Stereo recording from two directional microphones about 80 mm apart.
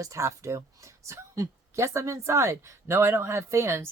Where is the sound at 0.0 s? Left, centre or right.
Right.